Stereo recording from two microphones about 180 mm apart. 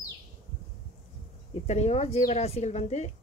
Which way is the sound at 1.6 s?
40° left (ahead or behind).